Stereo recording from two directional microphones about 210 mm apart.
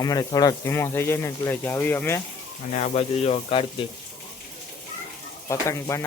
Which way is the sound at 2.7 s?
30° left (ahead or behind).